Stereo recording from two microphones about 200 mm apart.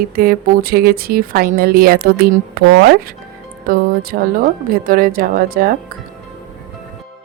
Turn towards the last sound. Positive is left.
turn(degrees=-45)  # may be behind; listen again after turning